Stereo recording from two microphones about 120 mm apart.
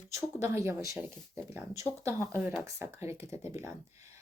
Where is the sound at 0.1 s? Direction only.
25° right (ahead or behind).